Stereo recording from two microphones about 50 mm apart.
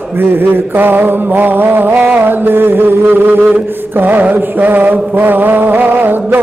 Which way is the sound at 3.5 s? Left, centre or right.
Right.